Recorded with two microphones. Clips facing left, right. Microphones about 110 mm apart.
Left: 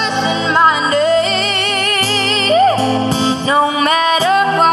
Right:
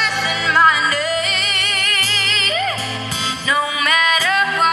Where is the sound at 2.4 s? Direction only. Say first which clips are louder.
Left 13 dB; 35° left (ahead or behind).